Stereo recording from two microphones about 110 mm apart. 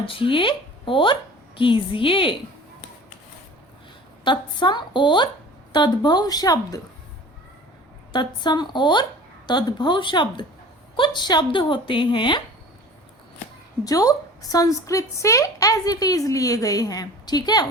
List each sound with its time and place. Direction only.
0.0 s a woman's voice: 50° left (ahead or behind)
4.2 s a woman's voice: 45° left (ahead or behind)
8.1 s speech: 40° left (ahead or behind)
13.8 s a woman's voice: 35° left (ahead or behind)